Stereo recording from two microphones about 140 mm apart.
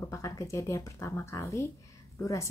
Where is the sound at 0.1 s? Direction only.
20° left (ahead or behind).